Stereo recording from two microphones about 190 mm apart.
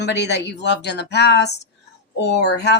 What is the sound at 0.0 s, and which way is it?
Speech, 60° left (ahead or behind).